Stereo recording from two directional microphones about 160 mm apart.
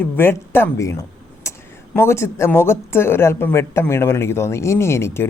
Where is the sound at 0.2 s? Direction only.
15° left (ahead or behind).